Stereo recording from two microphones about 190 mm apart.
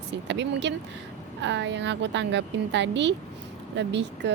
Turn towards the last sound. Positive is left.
turn(degrees=-70)  # may be behind; listen again after turning